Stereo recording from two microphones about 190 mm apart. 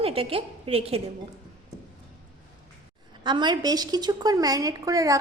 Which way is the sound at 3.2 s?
25° right (ahead or behind).